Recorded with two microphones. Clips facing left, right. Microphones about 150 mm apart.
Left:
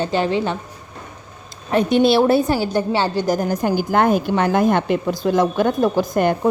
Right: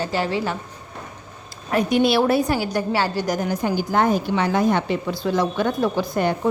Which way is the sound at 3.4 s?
45° left (ahead or behind).